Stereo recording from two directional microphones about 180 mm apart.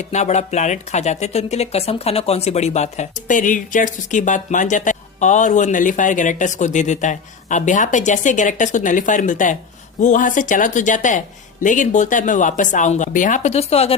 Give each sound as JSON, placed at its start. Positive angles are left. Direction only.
{"t": 0.0, "sound": "speech", "side_deg": 40}